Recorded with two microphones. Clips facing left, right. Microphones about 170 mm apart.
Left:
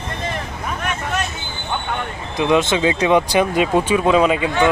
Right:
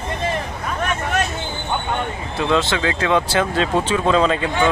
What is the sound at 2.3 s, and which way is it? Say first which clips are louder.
Speech: left 3 dB; 15° left (ahead or behind).